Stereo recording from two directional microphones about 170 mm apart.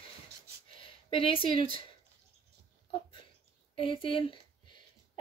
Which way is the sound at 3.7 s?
30° left (ahead or behind).